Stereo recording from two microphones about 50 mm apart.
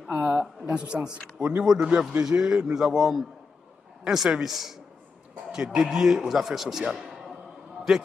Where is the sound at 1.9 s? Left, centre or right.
Right.